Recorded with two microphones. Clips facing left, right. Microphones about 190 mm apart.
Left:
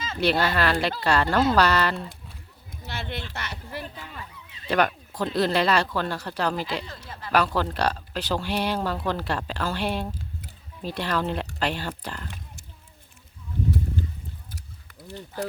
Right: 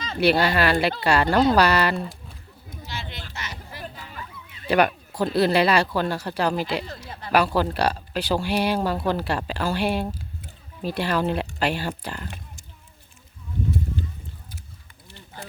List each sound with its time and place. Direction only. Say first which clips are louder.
0.2 s speech: right 3 dB; 10° right (ahead or behind)
2.8 s a sound: left 3 dB; 60° left (ahead or behind)
4.7 s speech: right 3 dB; 10° right (ahead or behind)
6.8 s speech: right 3 dB; 30° right (ahead or behind)
7.3 s speech: right 3 dB; 10° right (ahead or behind)